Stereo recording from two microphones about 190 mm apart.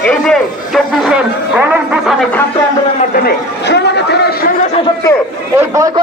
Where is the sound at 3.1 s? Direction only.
60° left (ahead or behind).